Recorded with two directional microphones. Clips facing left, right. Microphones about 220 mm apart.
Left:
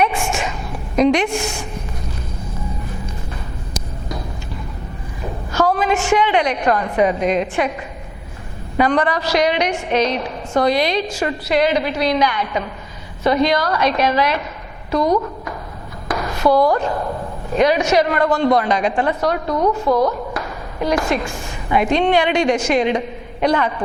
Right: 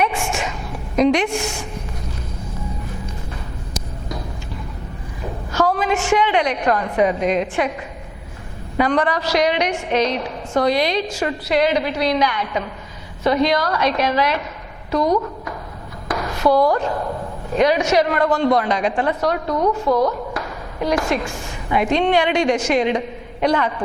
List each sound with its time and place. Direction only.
0.0 s a sound: 10° left (ahead or behind)
0.9 s a woman's voice: 10° left (ahead or behind)
3.8 s a sound: 10° left (ahead or behind)
5.5 s a woman's voice: 10° left (ahead or behind)
15.0 s a woman's voice: 30° left (ahead or behind)
16.0 s a sound: 15° left (ahead or behind)
16.7 s a woman's voice: 20° left (ahead or behind)
17.6 s a woman's voice: 10° left (ahead or behind)
19.5 s a woman's voice: 25° left (ahead or behind)
20.3 s a woman's voice: 20° left (ahead or behind)